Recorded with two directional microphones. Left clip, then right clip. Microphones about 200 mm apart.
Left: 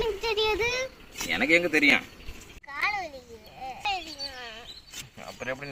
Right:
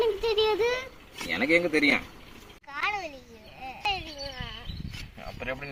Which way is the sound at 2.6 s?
20° left (ahead or behind).